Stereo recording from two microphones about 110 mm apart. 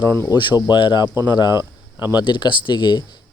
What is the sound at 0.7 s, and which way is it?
Speech, 45° left (ahead or behind).